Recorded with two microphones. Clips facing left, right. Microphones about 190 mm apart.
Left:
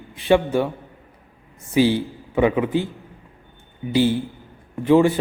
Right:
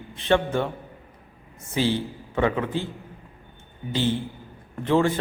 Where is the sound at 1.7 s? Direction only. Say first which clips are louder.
Left 6 dB; 10° left (ahead or behind).